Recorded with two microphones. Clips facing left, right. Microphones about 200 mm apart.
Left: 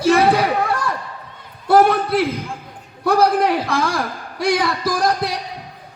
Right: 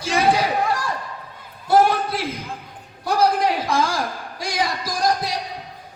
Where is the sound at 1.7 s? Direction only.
60° left (ahead or behind).